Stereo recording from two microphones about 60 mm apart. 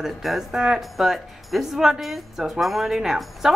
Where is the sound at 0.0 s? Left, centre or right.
Centre.